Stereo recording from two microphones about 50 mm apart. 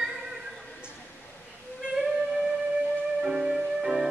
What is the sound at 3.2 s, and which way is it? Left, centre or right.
Music, centre.